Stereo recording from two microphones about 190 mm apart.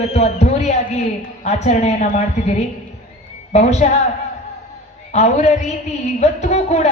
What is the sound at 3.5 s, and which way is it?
Speech, 35° left (ahead or behind).